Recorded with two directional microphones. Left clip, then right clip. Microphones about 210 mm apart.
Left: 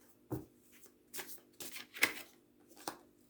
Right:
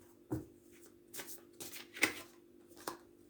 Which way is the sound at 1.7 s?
25° left (ahead or behind).